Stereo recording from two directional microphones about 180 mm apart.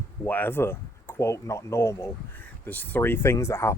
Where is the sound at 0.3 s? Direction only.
10° left (ahead or behind).